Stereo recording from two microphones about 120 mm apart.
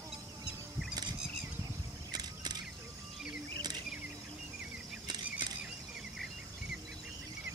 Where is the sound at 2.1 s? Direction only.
35° right (ahead or behind).